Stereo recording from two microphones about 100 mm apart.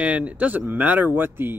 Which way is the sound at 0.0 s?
15° right (ahead or behind).